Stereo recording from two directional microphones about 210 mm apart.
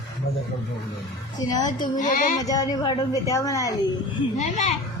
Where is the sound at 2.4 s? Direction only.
15° left (ahead or behind).